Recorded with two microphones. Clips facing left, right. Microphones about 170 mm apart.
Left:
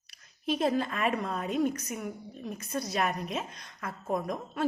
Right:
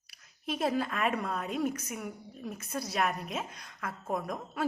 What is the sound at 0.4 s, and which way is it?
A woman's voice, centre (ahead or behind).